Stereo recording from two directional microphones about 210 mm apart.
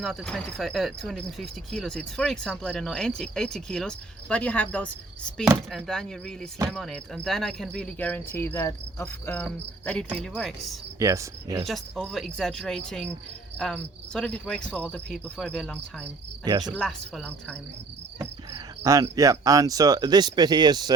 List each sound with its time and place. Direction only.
0.0 s speech: centre (ahead or behind)
11.0 s cricket: 15° right (ahead or behind)
11.6 s speech: centre (ahead or behind)
16.4 s cricket: 20° right (ahead or behind)
16.7 s speech: 5° left (ahead or behind)
18.2 s speech: 15° right (ahead or behind)